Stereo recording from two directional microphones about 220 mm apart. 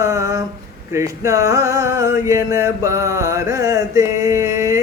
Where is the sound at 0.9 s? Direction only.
15° right (ahead or behind).